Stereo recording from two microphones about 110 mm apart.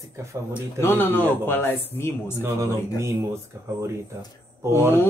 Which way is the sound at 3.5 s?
25° right (ahead or behind).